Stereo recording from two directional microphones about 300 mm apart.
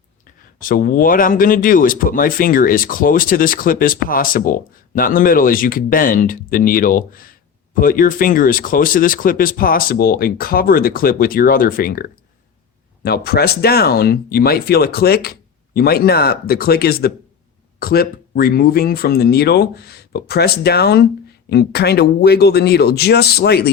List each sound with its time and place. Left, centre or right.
0.6 s speech: left